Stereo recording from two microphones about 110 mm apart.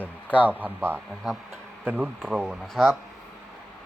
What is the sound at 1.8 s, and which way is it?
Speech, 15° right (ahead or behind).